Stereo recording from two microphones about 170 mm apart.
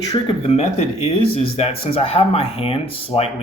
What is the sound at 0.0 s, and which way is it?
Speech, 20° left (ahead or behind).